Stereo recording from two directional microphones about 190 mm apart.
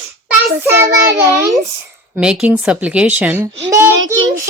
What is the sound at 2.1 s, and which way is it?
A woman's voice, 5° right (ahead or behind).